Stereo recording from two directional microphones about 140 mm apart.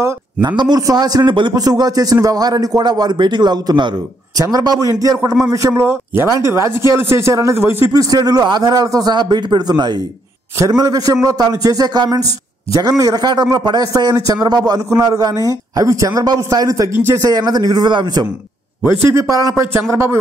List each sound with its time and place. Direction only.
0.0 s a man's voice: 30° right (ahead or behind)
18.8 s a man's voice: 20° right (ahead or behind)